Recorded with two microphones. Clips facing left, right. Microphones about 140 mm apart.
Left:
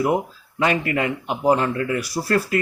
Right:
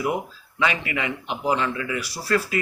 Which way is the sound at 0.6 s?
45° left (ahead or behind).